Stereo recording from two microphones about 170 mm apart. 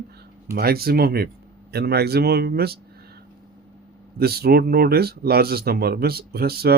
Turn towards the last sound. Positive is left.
turn(degrees=-65)  # may be behind; listen again after turning